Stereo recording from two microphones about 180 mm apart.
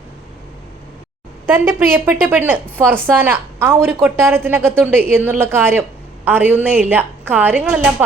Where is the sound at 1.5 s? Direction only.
10° right (ahead or behind).